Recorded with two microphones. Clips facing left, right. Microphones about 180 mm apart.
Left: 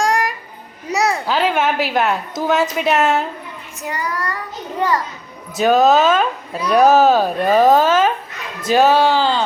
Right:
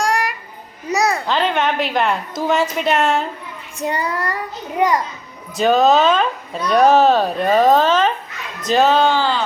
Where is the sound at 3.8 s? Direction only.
30° right (ahead or behind).